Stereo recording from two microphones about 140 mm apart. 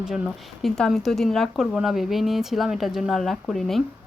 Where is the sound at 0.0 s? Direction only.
Centre (ahead or behind).